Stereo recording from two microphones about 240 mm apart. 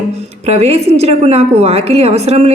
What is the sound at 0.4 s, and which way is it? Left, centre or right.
A woman's voice, right.